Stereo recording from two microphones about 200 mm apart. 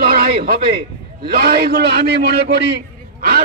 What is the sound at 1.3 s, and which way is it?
A man's voice, 50° right (ahead or behind).